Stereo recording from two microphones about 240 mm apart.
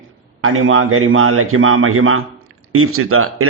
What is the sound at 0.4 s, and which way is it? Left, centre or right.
Speech, right.